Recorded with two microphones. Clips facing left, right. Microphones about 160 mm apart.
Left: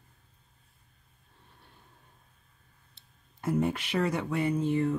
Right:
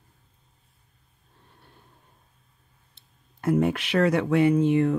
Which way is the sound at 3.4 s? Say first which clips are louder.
Right 6 dB; 80° right.